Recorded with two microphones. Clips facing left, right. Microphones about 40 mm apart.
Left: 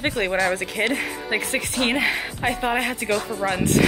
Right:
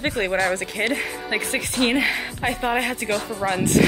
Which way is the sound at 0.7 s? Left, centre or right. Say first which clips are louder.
Even; left.